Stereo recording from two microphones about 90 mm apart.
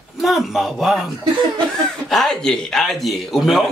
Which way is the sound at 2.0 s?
5° left (ahead or behind).